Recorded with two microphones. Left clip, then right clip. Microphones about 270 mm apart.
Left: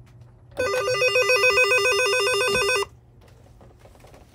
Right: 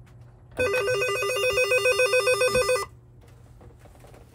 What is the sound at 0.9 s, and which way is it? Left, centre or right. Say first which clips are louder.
Telephone: left 6 dB; centre.